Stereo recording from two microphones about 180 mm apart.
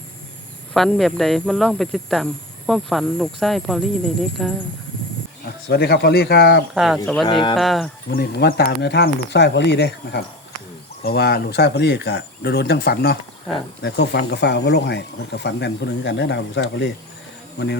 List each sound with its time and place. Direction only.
0.7 s speech: centre (ahead or behind)
5.6 s speech: 65° left (ahead or behind)
6.7 s speech: centre (ahead or behind)
7.3 s speech: 25° left (ahead or behind)
7.5 s speech: centre (ahead or behind)
8.1 s speech: 55° left (ahead or behind); by 16.9 s 80° left
17.6 s speech: 65° left (ahead or behind)